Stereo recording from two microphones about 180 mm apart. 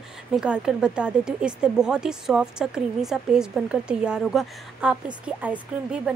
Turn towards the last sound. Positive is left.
turn(degrees=-5)  # may be behind; listen again after turning